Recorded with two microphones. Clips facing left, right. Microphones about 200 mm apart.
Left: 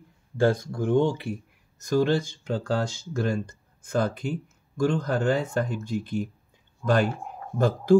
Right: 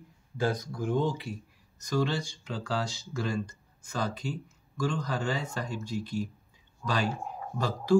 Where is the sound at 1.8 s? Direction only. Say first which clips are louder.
Left 7 dB; 50° left (ahead or behind).